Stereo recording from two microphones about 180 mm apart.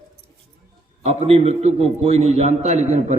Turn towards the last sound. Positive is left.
turn(degrees=-40)  # may be behind; listen again after turning